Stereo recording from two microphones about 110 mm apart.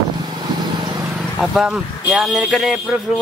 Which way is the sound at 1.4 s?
5° right (ahead or behind).